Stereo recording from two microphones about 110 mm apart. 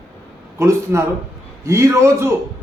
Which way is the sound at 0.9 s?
20° right (ahead or behind).